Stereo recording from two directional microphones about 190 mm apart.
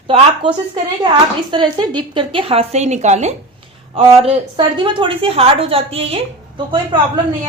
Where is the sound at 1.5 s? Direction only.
25° right (ahead or behind).